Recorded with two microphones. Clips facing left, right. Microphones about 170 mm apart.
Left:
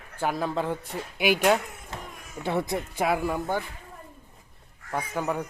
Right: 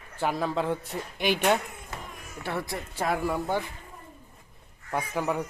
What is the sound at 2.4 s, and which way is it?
Speech, 20° left (ahead or behind).